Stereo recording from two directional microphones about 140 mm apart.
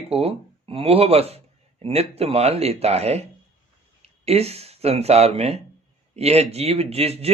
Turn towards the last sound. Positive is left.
turn(degrees=-45)  # may be behind; listen again after turning